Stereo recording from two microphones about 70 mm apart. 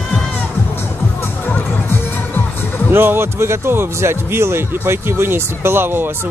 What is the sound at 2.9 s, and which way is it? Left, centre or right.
Speech, right.